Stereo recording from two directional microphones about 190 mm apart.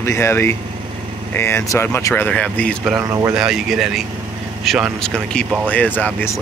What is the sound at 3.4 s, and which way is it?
Speech, centre (ahead or behind).